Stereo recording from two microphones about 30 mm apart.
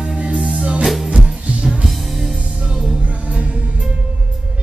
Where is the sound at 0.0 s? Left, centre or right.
Right.